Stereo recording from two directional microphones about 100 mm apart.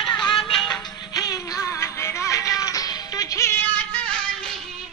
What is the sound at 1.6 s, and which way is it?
Music, 25° left (ahead or behind).